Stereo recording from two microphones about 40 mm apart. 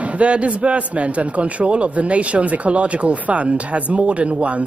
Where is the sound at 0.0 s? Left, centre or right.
Right.